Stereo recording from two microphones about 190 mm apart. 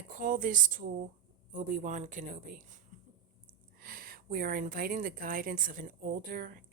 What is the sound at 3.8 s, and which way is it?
A woman's voice, 50° right (ahead or behind).